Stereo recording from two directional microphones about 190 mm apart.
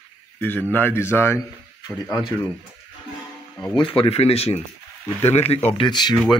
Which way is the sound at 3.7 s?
25° left (ahead or behind).